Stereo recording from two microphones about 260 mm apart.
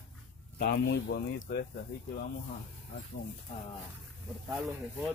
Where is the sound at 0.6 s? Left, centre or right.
Left.